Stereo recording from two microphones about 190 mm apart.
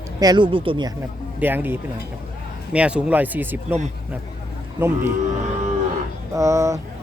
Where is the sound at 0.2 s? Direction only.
20° right (ahead or behind).